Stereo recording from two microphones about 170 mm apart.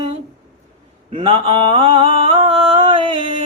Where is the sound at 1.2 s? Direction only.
30° right (ahead or behind).